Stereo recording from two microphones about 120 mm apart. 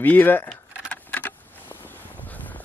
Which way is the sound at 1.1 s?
10° left (ahead or behind).